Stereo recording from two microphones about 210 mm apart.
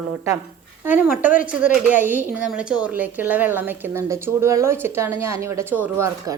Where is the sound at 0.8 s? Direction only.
10° right (ahead or behind).